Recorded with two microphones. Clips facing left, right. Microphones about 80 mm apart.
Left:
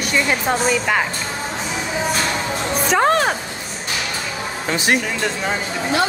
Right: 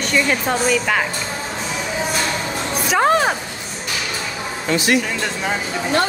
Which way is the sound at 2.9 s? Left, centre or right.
Centre.